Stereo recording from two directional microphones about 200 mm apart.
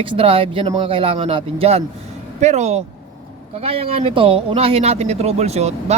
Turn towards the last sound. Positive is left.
turn(degrees=-30)  # may be behind; listen again after turning